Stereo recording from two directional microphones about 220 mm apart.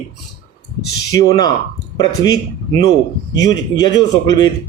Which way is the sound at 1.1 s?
15° left (ahead or behind).